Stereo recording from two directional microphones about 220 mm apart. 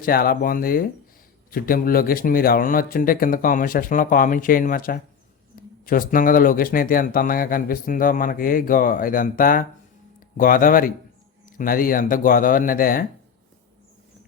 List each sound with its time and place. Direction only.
0.0 s speech: 40° left (ahead or behind)